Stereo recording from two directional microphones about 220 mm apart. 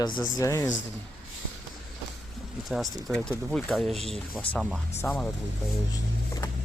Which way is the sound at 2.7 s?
Centre (ahead or behind).